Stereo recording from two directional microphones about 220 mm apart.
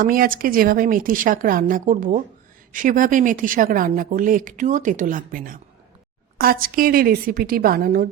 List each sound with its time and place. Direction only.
0.0 s speech: 40° right (ahead or behind)